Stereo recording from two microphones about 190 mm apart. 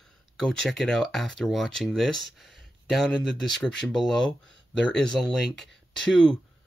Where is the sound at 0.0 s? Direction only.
Centre (ahead or behind).